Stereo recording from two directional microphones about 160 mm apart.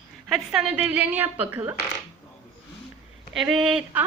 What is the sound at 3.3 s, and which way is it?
Speech, centre (ahead or behind).